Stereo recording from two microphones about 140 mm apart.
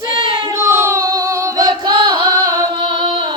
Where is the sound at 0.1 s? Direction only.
35° right (ahead or behind).